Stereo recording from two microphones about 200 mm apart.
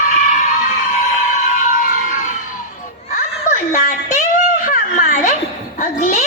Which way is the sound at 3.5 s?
40° left (ahead or behind).